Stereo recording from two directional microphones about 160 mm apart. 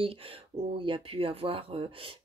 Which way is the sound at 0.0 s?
35° right (ahead or behind).